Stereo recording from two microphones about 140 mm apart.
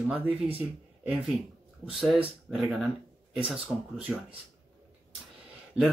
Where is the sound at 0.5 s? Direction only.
10° right (ahead or behind).